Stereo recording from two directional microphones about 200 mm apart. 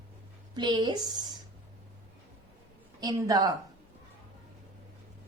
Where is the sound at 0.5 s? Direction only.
20° right (ahead or behind).